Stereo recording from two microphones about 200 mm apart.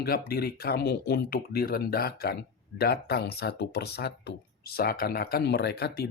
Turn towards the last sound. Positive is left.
turn(degrees=55)  # may be behind; listen again after turning